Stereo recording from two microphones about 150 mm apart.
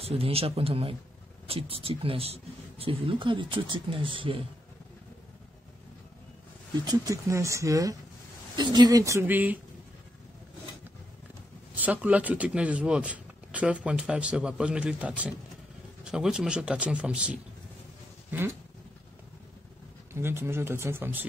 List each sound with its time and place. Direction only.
0.0 s speech: 40° right (ahead or behind)
6.8 s speech: 25° right (ahead or behind)
11.7 s speech: 10° right (ahead or behind)
20.1 s speech: 15° right (ahead or behind)